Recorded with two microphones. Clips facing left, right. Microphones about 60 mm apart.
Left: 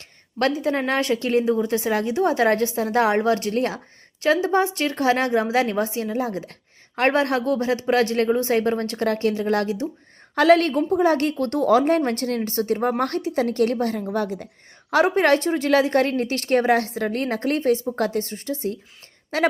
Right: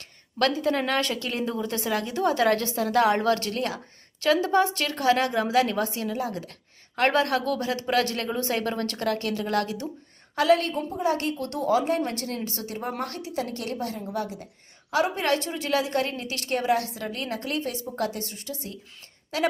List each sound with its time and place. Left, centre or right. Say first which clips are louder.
0.5 s a woman's voice: left 2 dB; left
10.3 s a woman's voice: left 6 dB; left